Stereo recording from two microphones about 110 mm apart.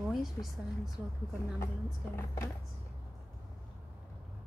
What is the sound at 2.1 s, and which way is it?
Speech, 25° left (ahead or behind).